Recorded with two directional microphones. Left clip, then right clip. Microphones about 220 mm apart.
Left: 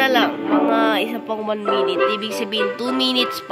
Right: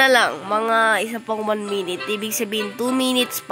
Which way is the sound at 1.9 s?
35° right (ahead or behind).